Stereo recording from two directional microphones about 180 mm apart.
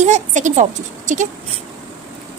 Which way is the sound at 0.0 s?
40° right (ahead or behind).